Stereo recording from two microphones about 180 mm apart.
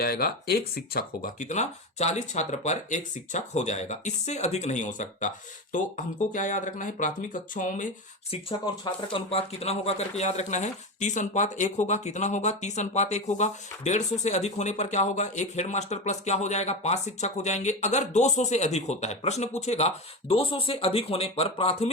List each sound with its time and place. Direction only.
0.0 s speech: 60° left (ahead or behind)
8.3 s speech: 25° left (ahead or behind)